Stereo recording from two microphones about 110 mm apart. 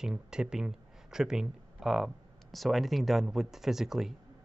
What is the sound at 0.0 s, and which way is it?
Speech, 5° right (ahead or behind).